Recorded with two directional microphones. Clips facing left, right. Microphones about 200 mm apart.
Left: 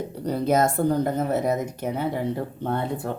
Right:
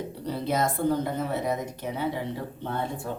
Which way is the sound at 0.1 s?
45° left (ahead or behind).